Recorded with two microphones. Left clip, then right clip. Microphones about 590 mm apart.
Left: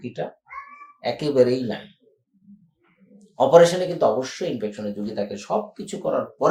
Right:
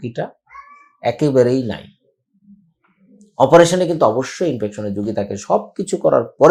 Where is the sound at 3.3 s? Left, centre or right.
Right.